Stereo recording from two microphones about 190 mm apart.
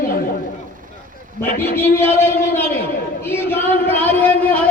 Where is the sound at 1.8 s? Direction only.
10° left (ahead or behind).